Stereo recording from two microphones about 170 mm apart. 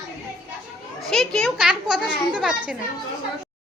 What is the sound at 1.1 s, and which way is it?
Speech, 5° left (ahead or behind).